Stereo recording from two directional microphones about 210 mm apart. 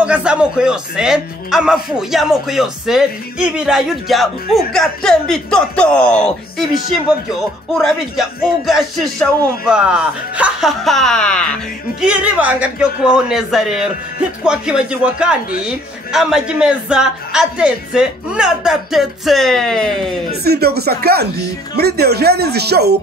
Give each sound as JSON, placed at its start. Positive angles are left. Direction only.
{"t": 0.0, "sound": "a man's voice", "side_deg": -5}
{"t": 7.7, "sound": "a man's voice", "side_deg": 0}
{"t": 20.4, "sound": "speech", "side_deg": -50}